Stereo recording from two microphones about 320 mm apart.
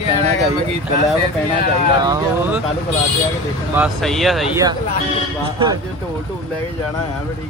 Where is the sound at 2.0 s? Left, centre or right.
Centre.